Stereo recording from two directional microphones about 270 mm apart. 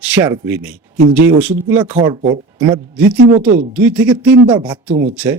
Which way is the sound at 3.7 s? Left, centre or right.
Centre.